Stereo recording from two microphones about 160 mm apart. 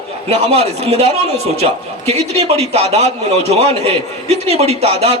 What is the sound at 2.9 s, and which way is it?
A man's voice, 40° right (ahead or behind).